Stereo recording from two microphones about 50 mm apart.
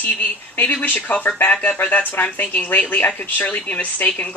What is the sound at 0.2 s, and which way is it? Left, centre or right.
Speech, left.